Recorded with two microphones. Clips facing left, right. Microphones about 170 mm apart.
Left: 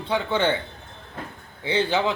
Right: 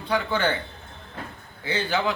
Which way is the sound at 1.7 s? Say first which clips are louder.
Left 3 dB; 25° left (ahead or behind).